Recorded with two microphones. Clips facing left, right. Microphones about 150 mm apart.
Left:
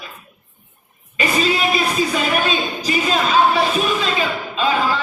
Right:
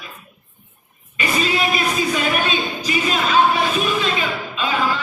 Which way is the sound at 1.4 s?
35° left (ahead or behind).